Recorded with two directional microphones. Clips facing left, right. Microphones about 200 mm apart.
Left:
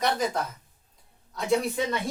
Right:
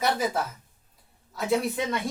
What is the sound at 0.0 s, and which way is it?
Speech, 5° right (ahead or behind).